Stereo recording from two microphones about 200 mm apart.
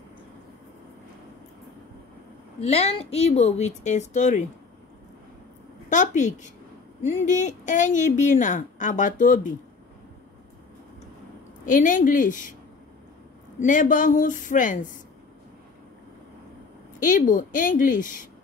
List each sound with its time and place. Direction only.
2.6 s a woman's voice: 30° left (ahead or behind)
5.9 s a woman's voice: 40° left (ahead or behind)
11.6 s a woman's voice: 40° left (ahead or behind)
13.6 s a woman's voice: 40° left (ahead or behind)
17.0 s a woman's voice: 40° left (ahead or behind)